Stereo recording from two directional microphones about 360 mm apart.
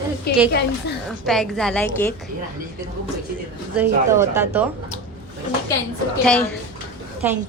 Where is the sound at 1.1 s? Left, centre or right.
Centre.